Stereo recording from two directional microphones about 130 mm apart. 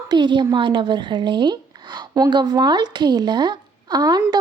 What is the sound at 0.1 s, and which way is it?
A woman's voice, 35° right (ahead or behind).